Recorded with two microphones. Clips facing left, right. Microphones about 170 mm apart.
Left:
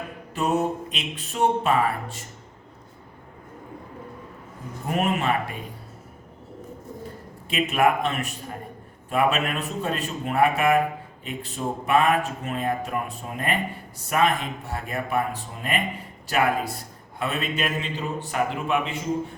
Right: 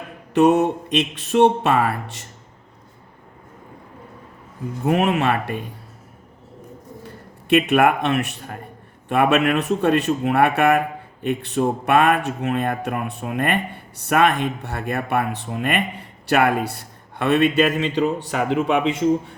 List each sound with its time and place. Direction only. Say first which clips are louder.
0.3 s speech: right 8 dB; 80° right
4.9 s speech: right 5 dB; 80° right
7.5 s speech: right 6 dB; 70° right (ahead or behind)